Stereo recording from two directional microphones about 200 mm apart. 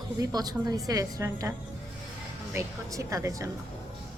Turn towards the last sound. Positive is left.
turn(degrees=-15)  # may be behind; listen again after turning